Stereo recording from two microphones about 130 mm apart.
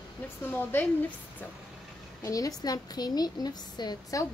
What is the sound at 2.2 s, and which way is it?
A woman's voice, 25° left (ahead or behind).